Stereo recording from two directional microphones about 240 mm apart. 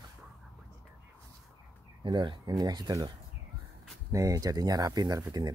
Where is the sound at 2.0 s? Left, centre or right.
Centre.